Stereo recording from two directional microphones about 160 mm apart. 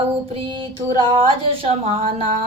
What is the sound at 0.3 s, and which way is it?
Speech, 35° right (ahead or behind).